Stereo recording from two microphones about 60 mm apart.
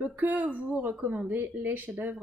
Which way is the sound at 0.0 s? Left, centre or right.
Right.